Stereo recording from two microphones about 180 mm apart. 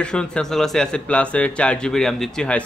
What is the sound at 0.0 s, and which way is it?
Speech, 5° left (ahead or behind).